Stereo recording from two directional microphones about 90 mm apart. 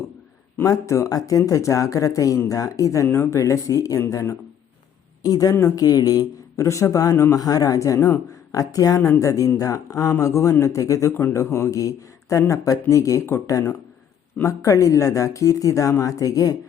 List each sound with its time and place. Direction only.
0.6 s speech: 35° left (ahead or behind)